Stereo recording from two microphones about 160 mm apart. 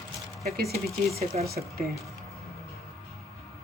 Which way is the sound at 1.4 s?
70° right (ahead or behind).